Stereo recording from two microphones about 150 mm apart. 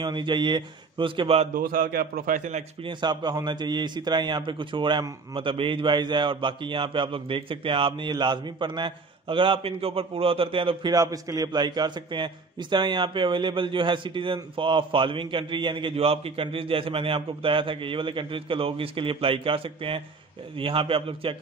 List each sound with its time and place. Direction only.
0.0 s a man's voice: 30° right (ahead or behind)
1.5 s a man's voice: 70° right (ahead or behind)
2.8 s a man's voice: 30° right (ahead or behind)